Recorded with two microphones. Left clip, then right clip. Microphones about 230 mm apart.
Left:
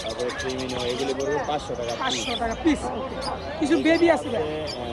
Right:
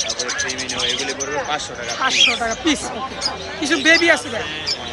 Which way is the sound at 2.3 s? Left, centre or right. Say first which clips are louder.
Right 6 dB; right.